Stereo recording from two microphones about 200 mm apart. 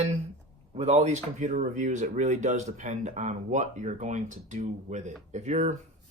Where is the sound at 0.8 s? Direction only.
35° right (ahead or behind).